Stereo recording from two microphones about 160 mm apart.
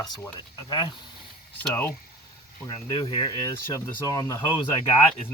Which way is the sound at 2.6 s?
25° left (ahead or behind).